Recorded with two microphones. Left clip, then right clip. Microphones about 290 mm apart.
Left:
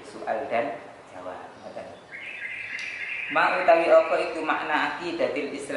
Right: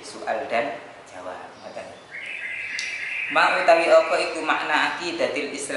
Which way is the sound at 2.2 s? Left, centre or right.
Centre.